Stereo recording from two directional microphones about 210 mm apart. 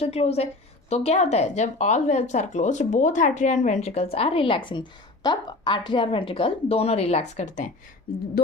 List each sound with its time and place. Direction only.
0.0 s a woman's voice: 30° left (ahead or behind)